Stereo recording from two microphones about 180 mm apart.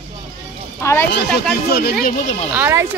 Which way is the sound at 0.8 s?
15° left (ahead or behind).